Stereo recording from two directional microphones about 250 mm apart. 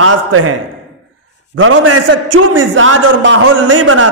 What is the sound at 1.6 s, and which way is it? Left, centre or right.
A man's voice, right.